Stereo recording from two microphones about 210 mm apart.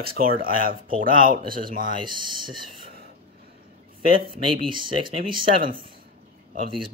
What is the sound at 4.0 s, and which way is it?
Speech, 25° right (ahead or behind).